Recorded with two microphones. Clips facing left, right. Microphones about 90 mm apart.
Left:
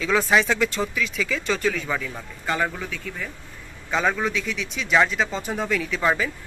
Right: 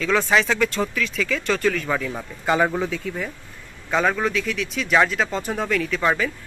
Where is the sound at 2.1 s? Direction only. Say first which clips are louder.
Right 5 dB; 20° right (ahead or behind).